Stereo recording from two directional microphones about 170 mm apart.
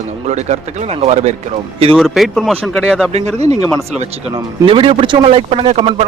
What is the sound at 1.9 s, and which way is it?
Speech, centre (ahead or behind).